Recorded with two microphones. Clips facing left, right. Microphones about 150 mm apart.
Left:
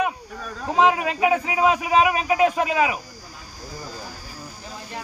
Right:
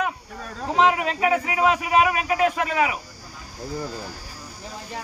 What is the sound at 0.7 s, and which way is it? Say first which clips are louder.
Speech: left 1 dB; 20° left (ahead or behind).